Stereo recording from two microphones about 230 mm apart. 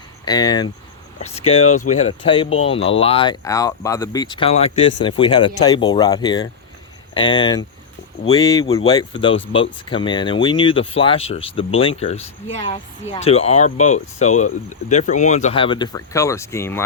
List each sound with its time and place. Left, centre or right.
0.3 s speech: centre